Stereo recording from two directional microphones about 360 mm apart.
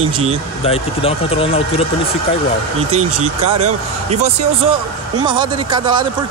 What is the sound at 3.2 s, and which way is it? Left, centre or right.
Speech, centre.